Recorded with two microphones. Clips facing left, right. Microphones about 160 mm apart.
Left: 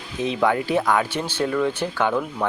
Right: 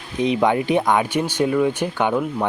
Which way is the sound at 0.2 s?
20° right (ahead or behind).